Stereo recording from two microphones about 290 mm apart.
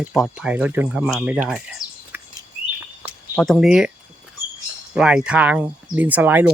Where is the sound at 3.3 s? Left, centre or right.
Centre.